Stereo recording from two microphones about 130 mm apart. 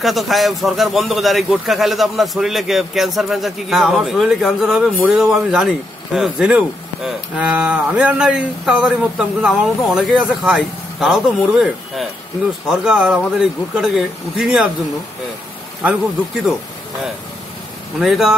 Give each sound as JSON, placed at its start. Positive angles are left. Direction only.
{"t": 0.0, "sound": "a man's voice", "side_deg": 0}
{"t": 17.9, "sound": "a man's voice", "side_deg": 0}